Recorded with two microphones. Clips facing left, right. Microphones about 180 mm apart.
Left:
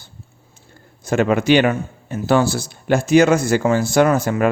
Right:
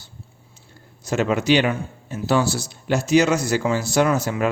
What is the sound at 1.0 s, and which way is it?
A man's voice, 55° left (ahead or behind).